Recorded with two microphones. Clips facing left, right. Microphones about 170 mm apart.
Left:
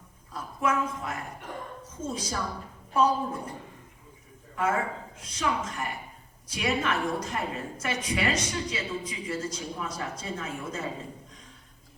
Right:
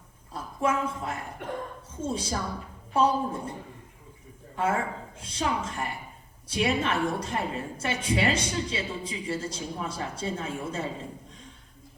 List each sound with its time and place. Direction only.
0.3 s a woman's voice: 30° right (ahead or behind)
4.6 s a woman's voice: 30° right (ahead or behind)